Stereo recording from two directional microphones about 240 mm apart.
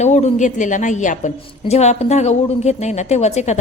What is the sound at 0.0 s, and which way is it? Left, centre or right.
A woman's voice, left.